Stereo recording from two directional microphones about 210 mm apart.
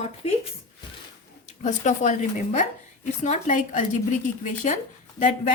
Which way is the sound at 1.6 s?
35° left (ahead or behind).